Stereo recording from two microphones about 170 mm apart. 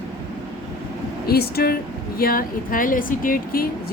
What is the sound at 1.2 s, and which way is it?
Speech, 65° left (ahead or behind).